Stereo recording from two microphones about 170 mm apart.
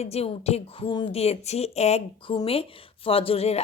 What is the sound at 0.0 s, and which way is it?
Speech, 35° left (ahead or behind).